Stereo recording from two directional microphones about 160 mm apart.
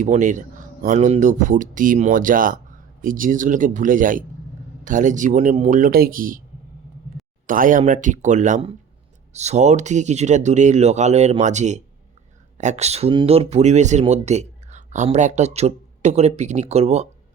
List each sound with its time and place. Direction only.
0.0 s speech: 50° right (ahead or behind)
7.4 s speech: 60° right (ahead or behind); by 17.1 s 40° right (ahead or behind)